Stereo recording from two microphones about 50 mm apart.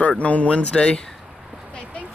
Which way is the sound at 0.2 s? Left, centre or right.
Left.